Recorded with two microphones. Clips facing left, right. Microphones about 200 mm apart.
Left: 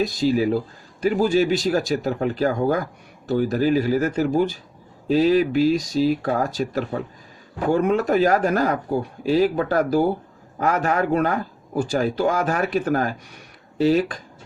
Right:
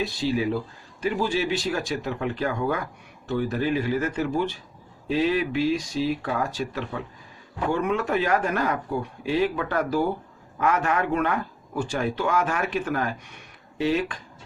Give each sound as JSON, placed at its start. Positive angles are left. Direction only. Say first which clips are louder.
{"t": 0.0, "sound": "a man's voice", "louder": "left 5 dB", "side_deg": 40}